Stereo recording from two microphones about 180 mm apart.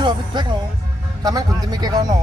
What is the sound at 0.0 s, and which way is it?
Speech, 25° right (ahead or behind).